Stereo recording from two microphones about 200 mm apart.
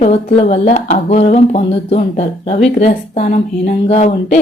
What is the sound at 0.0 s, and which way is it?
Speech, 30° left (ahead or behind).